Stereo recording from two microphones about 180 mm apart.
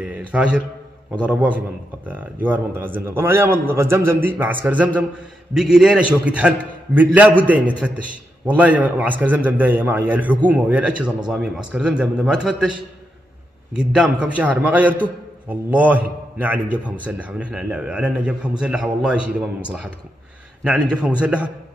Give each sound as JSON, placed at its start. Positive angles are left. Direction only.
{"t": 0.0, "sound": "a man's voice", "side_deg": -5}
{"t": 13.7, "sound": "a man's voice", "side_deg": -5}